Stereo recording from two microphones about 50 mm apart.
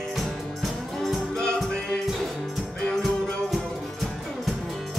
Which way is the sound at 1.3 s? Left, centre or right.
Centre.